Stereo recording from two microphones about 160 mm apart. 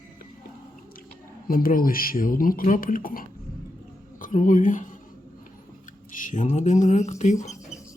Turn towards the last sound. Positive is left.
turn(degrees=50)  # may be behind; listen again after turning